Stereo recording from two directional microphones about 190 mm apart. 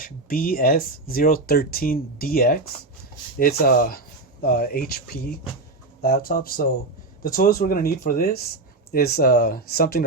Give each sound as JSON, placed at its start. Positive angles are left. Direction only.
{"t": 0.0, "sound": "speech", "side_deg": 50}